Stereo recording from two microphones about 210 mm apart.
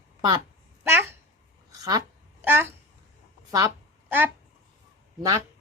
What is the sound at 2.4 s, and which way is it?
Speech, 10° right (ahead or behind).